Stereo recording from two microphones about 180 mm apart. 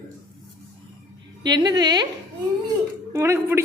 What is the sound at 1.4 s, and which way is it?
Speech, 25° right (ahead or behind).